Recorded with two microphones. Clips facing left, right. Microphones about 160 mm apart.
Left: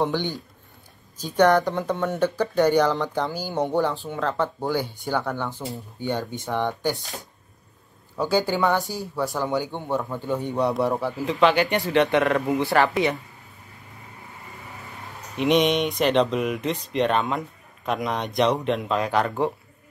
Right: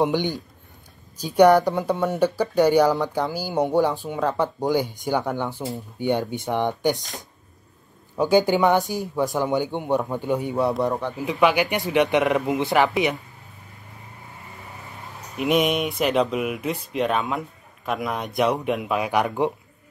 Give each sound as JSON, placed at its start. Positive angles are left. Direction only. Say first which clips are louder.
{"t": 0.0, "sound": "speech", "louder": "right 3 dB", "side_deg": -15}
{"t": 8.2, "sound": "speech", "louder": "right 4 dB", "side_deg": -15}
{"t": 11.1, "sound": "speech", "louder": "even", "side_deg": -15}
{"t": 15.3, "sound": "speech", "louder": "left 1 dB", "side_deg": -5}